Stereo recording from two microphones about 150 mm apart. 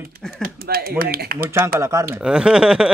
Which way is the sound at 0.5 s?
90° right.